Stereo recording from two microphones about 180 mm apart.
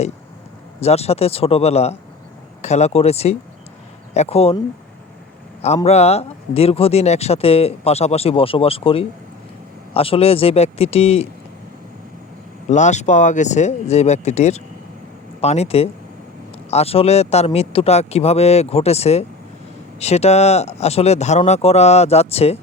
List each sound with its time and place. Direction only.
0.8 s speech: 35° left (ahead or behind)
5.6 s speech: 35° left (ahead or behind)
12.6 s speech: 40° left (ahead or behind)